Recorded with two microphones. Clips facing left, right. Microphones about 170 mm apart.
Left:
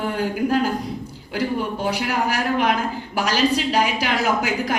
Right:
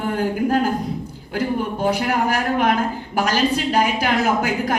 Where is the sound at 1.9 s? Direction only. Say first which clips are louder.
Right 4 dB; 50° right (ahead or behind).